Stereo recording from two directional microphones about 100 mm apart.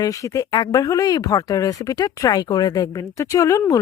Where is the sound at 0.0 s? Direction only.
35° left (ahead or behind).